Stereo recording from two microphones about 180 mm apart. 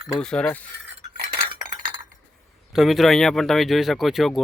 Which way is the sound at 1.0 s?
30° right (ahead or behind).